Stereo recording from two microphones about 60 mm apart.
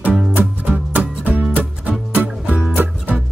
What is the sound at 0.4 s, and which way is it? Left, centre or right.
Music, right.